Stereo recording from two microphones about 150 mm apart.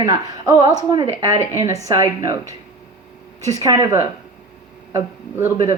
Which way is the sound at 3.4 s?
25° right (ahead or behind).